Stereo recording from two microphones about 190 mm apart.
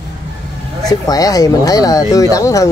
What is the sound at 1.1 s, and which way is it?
Speech, 20° left (ahead or behind).